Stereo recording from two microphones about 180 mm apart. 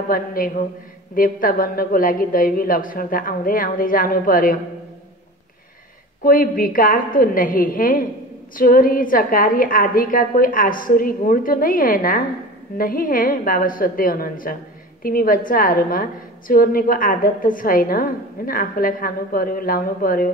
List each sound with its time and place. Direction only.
0.1 s a woman's voice: 50° left (ahead or behind)
6.2 s a woman's voice: 55° left (ahead or behind)